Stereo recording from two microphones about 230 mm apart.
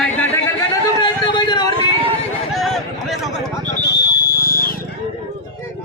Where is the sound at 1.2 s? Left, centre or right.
Centre.